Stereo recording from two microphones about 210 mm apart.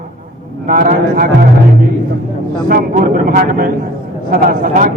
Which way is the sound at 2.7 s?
45° right (ahead or behind).